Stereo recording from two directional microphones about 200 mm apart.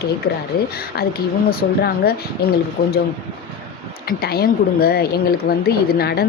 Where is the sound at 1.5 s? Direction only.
50° left (ahead or behind).